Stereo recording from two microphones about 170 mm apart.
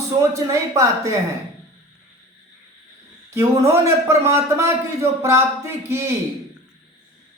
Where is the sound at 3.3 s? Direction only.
15° right (ahead or behind).